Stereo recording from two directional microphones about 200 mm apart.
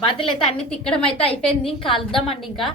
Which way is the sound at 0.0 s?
25° left (ahead or behind).